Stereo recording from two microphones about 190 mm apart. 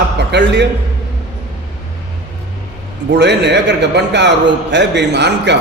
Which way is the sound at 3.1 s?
65° right (ahead or behind).